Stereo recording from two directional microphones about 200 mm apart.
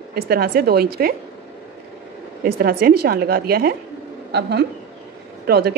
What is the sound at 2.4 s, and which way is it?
A woman's voice, 50° right (ahead or behind).